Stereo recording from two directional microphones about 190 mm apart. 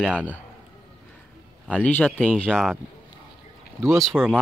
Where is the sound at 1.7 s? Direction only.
5° left (ahead or behind).